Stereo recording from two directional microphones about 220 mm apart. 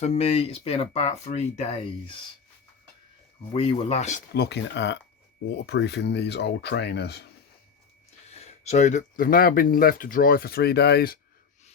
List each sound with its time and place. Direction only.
0.0 s speech: 30° left (ahead or behind)
3.5 s speech: 25° left (ahead or behind)
4.4 s speech: 50° left (ahead or behind)
8.3 s speech: 30° left (ahead or behind)